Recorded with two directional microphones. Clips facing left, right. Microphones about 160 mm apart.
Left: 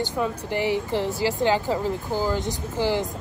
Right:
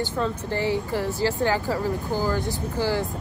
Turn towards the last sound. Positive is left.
turn(degrees=20)  # may be behind; listen again after turning